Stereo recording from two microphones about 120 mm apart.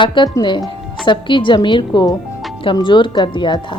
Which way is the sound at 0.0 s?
40° left (ahead or behind).